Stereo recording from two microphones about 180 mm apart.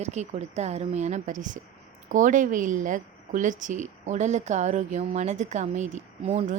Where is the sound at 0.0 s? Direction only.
40° right (ahead or behind).